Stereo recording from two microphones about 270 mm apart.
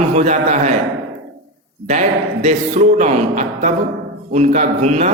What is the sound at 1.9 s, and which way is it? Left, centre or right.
A man's voice, right.